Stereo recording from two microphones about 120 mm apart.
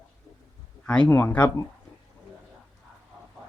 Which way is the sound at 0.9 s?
10° left (ahead or behind).